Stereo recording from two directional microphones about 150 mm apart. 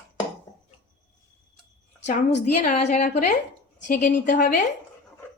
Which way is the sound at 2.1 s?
55° left (ahead or behind).